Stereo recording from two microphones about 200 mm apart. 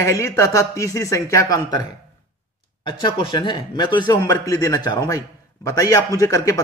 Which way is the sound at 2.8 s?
25° left (ahead or behind).